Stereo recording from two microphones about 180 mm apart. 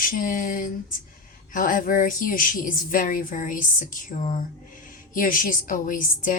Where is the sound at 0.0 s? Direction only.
50° left (ahead or behind).